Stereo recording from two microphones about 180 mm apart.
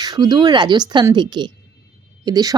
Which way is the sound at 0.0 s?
25° right (ahead or behind).